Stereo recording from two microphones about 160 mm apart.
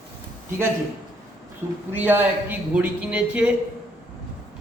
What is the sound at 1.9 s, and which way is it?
Speech, 10° right (ahead or behind).